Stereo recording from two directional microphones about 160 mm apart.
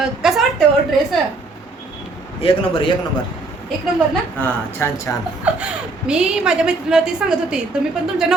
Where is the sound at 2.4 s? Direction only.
35° left (ahead or behind).